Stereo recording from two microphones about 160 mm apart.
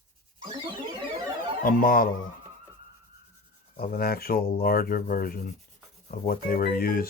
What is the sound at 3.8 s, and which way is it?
Speech, 65° left (ahead or behind).